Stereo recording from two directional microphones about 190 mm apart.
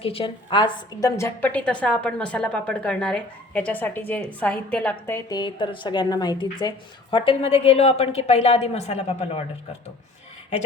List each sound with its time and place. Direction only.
0.0 s a woman's voice: 30° left (ahead or behind)